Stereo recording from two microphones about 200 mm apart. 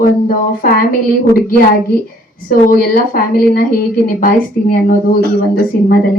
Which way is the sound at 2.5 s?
45° left (ahead or behind).